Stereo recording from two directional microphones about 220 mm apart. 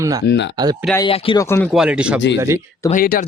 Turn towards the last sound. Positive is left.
turn(degrees=40)  # may be behind; listen again after turning